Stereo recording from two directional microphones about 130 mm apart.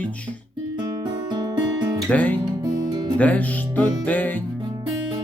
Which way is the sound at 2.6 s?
30° right (ahead or behind).